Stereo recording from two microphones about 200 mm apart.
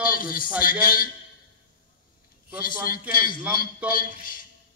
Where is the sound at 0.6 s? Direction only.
45° left (ahead or behind).